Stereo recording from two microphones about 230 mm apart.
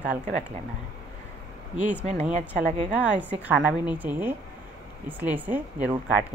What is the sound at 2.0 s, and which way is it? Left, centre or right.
Speech, right.